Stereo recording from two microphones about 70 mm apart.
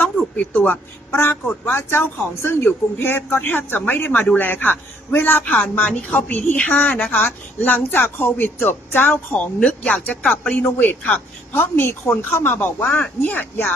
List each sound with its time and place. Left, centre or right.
0.5 s a man's voice: centre
1.1 s a man's voice: left